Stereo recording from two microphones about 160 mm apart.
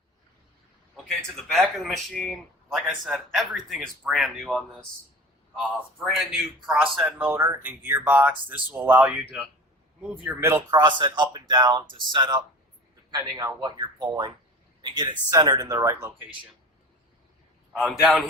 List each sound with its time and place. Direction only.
0.9 s speech: centre (ahead or behind)
6.0 s a man's voice: centre (ahead or behind)
10.4 s a man's voice: 20° right (ahead or behind)
17.7 s speech: centre (ahead or behind)